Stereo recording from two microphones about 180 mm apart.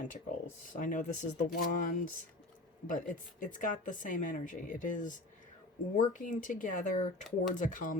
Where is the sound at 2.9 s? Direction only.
50° left (ahead or behind).